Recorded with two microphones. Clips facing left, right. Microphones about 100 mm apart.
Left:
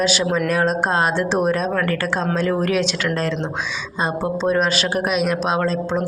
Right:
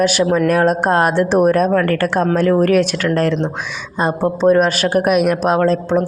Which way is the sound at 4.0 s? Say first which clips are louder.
Right 6 dB; 50° right (ahead or behind).